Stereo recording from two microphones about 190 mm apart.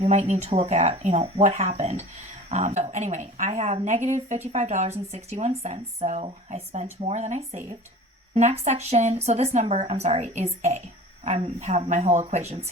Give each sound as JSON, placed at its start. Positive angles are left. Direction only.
{"t": 0.0, "sound": "speech", "side_deg": -35}